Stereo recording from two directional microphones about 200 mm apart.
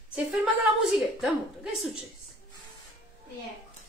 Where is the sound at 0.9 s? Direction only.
5° right (ahead or behind).